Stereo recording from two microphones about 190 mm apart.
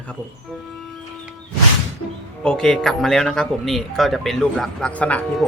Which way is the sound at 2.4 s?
5° left (ahead or behind).